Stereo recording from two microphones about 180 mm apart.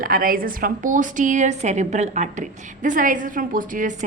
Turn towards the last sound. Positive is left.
turn(degrees=-50)  # may be behind; listen again after turning